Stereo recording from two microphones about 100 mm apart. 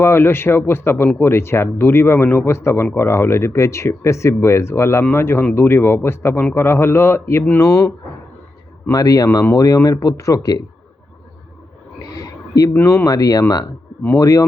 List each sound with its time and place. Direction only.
0.0 s speech: 25° left (ahead or behind)
7.6 s speech: 35° left (ahead or behind)
8.9 s speech: 40° left (ahead or behind)
12.1 s a sound: 35° left (ahead or behind)
12.7 s speech: 25° left (ahead or behind)